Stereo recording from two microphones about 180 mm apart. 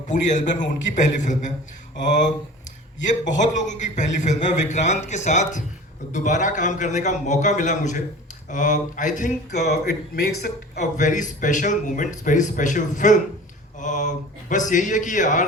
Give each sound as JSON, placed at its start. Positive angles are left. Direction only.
{"t": 0.1, "sound": "a man's voice", "side_deg": 45}
{"t": 3.0, "sound": "a man's voice", "side_deg": 45}
{"t": 9.6, "sound": "a man's voice", "side_deg": 65}
{"t": 10.8, "sound": "a man's voice", "side_deg": 45}